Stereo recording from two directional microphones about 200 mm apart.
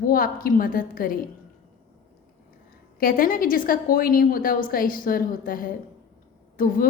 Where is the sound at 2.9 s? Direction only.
45° left (ahead or behind).